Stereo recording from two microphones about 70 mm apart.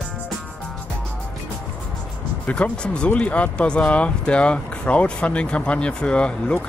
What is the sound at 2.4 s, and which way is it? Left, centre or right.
Speech, centre.